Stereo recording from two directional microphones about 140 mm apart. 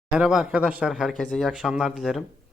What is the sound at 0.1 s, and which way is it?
Speech, 5° right (ahead or behind).